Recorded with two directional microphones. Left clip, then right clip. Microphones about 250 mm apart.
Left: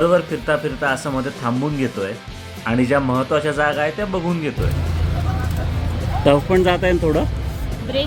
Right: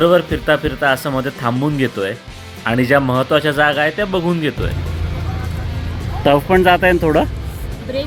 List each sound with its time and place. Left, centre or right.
0.0 s speech: centre
6.2 s speech: right